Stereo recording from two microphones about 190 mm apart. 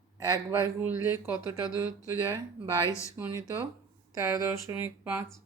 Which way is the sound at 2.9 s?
15° left (ahead or behind).